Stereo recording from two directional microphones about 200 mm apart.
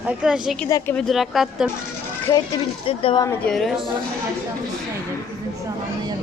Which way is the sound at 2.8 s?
25° left (ahead or behind).